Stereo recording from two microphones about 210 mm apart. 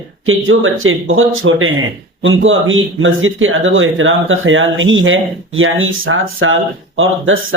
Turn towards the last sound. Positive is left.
turn(degrees=-70)  # may be behind; listen again after turning